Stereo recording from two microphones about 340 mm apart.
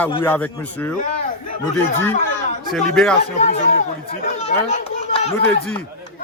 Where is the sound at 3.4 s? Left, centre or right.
Left.